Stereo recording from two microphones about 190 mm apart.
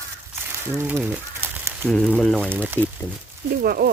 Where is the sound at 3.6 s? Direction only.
55° right (ahead or behind).